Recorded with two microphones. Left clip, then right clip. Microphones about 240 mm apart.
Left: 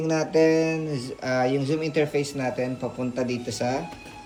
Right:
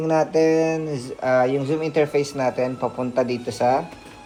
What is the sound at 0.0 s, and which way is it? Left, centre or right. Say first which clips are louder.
Speech: right 3 dB; centre.